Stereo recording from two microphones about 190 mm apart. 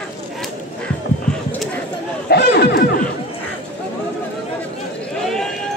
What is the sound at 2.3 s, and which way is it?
Chatter, 55° left (ahead or behind).